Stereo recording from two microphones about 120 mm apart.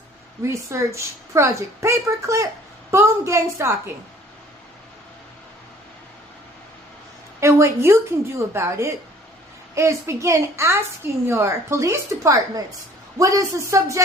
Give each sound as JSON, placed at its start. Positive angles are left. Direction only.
{"t": 0.4, "sound": "a woman's voice", "side_deg": -25}
{"t": 7.3, "sound": "a woman's voice", "side_deg": -20}